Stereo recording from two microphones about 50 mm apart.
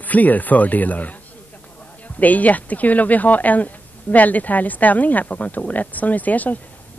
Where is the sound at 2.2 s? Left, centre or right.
Left.